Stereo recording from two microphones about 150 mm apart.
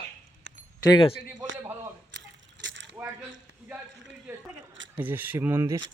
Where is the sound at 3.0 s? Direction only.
15° right (ahead or behind).